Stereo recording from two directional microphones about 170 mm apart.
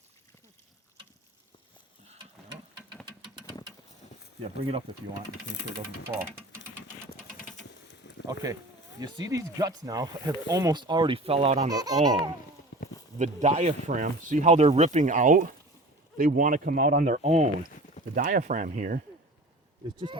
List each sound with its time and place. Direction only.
3.1 s a sound: 30° right (ahead or behind)
4.4 s speech: 35° right (ahead or behind)
6.1 s speech: 15° right (ahead or behind)
8.3 s speech: 20° right (ahead or behind); by 11.7 s 40° right (ahead or behind)
11.7 s speech: 20° right (ahead or behind)
12.7 s a sound: 90° left
13.1 s speech: 45° right (ahead or behind)